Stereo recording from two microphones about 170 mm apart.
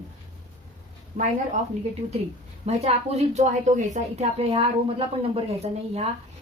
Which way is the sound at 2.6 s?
40° right (ahead or behind).